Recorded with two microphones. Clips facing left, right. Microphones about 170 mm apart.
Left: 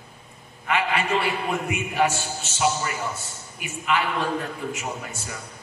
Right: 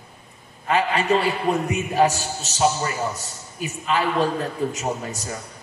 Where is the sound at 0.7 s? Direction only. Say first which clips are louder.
Right 4 dB; 35° right (ahead or behind).